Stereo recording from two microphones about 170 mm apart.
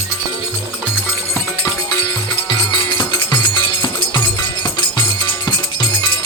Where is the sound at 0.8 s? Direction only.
10° left (ahead or behind).